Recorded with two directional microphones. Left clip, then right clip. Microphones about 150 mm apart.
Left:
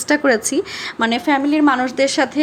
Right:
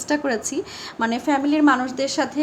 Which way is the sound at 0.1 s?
20° left (ahead or behind).